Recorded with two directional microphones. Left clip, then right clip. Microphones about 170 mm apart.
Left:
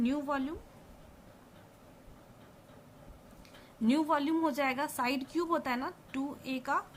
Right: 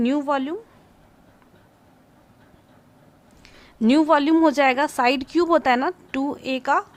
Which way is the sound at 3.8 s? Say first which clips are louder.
Right 13 dB; 55° right (ahead or behind).